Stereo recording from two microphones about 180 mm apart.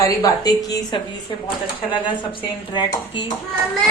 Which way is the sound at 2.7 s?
25° left (ahead or behind).